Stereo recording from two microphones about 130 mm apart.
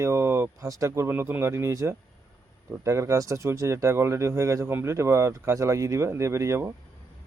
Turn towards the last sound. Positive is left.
turn(degrees=-20)  # may be behind; listen again after turning